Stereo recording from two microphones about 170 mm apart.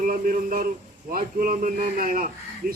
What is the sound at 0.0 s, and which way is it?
A man's voice, 55° right (ahead or behind).